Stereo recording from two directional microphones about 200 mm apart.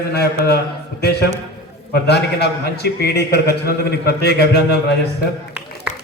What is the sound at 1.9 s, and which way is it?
A man's voice, 55° left (ahead or behind).